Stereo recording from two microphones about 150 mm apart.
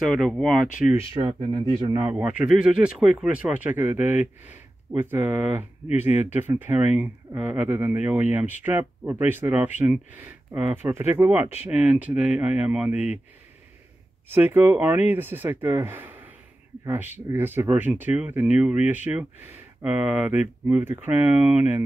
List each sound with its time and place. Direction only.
0.0 s speech: centre (ahead or behind)
0.8 s speech: 15° right (ahead or behind)
1.1 s speech: 30° right (ahead or behind); by 13.2 s 10° right (ahead or behind)
14.3 s speech: 15° right (ahead or behind)